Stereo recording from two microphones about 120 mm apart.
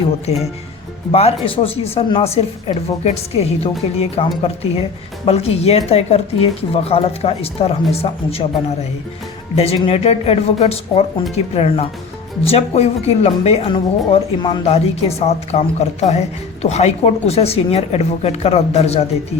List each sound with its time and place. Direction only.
1.1 s speech: 55° left (ahead or behind)
5.2 s speech: 55° left (ahead or behind); by 14.6 s 40° left (ahead or behind)
14.6 s speech: 60° left (ahead or behind)